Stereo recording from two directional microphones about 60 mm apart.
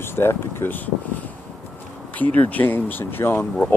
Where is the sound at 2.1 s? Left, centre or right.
Left.